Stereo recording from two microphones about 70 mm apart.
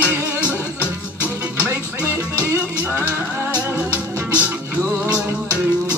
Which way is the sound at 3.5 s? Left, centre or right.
Left.